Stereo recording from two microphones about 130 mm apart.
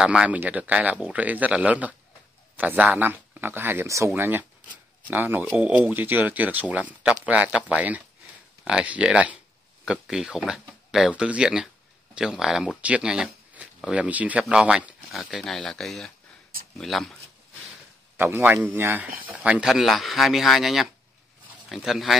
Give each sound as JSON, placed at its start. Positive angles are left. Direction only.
{"t": 0.0, "sound": "speech", "side_deg": -10}
{"t": 18.1, "sound": "speech", "side_deg": -15}